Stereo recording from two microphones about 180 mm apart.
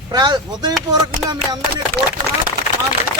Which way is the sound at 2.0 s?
65° right (ahead or behind).